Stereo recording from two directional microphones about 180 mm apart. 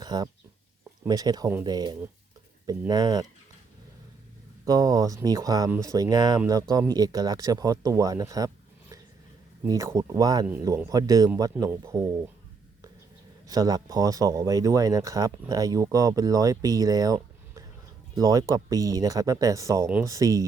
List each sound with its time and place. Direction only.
0.0 s a sound: 25° right (ahead or behind)
1.0 s speech: 20° right (ahead or behind)
4.6 s speech: 20° right (ahead or behind)
9.6 s speech: 15° right (ahead or behind)
13.5 s speech: 20° right (ahead or behind)
18.2 s speech: 20° right (ahead or behind)